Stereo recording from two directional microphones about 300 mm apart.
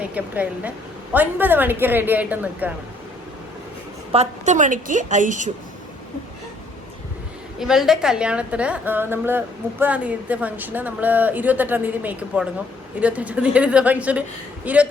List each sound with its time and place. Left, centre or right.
0.0 s a woman's voice: centre
4.1 s a woman's voice: right
7.6 s a woman's voice: centre